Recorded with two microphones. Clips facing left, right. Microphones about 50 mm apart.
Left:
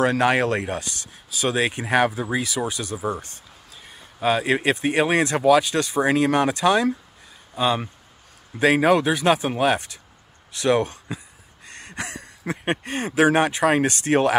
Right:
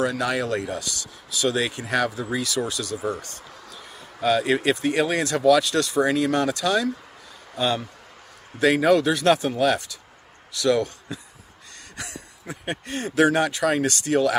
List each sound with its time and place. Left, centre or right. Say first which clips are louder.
0.0 s speech: left 5 dB; left
4.2 s speech: even; left
6.0 s speech: left 2 dB; left
7.5 s speech: left 2 dB; centre
9.6 s speech: left 1 dB; left
11.7 s a sound: left 5 dB; left
12.8 s speech: even; left